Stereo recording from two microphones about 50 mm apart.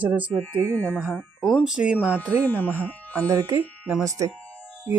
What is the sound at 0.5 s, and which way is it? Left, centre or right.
Speech, right.